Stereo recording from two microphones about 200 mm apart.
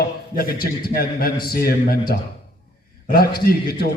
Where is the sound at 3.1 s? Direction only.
50° left (ahead or behind).